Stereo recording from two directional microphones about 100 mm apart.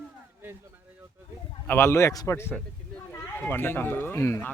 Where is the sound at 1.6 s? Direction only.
25° left (ahead or behind).